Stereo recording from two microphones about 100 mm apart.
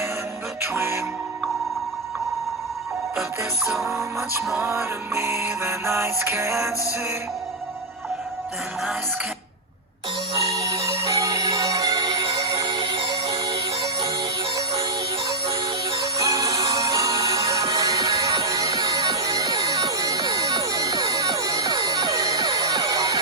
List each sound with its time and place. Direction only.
0.6 s music: 25° right (ahead or behind)
4.6 s music: 25° right (ahead or behind)
10.3 s music: 65° right (ahead or behind)
11.1 s music: 35° right (ahead or behind)
16.0 s music: 35° right (ahead or behind)